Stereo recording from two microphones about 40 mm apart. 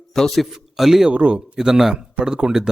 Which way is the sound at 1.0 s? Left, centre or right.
Right.